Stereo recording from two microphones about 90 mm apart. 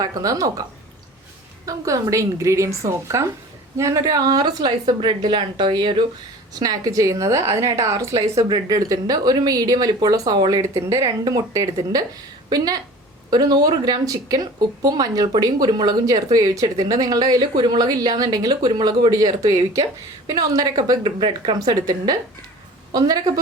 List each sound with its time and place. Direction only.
0.0 s a woman's voice: 40° right (ahead or behind)
1.6 s a woman's voice: 40° right (ahead or behind); by 6.0 s 60° right (ahead or behind)
6.5 s a woman's voice: 45° right (ahead or behind)
8.4 s speech: 50° right (ahead or behind)
10.6 s a woman's voice: 35° right (ahead or behind)
21.0 s speech: 60° right (ahead or behind)
21.5 s speech: 50° right (ahead or behind)